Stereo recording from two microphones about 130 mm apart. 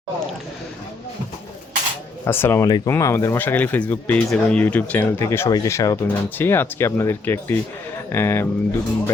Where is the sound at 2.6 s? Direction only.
30° left (ahead or behind).